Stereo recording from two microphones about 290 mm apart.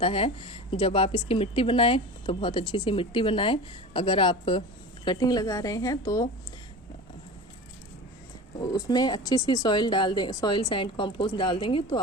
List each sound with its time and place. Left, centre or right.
0.0 s speech: centre
8.7 s speech: centre